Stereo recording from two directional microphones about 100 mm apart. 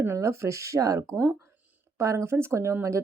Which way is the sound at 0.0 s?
30° right (ahead or behind).